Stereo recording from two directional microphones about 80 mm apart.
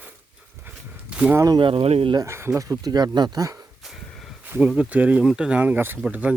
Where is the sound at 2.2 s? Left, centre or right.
Right.